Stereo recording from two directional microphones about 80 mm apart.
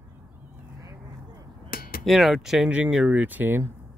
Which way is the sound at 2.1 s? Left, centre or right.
Centre.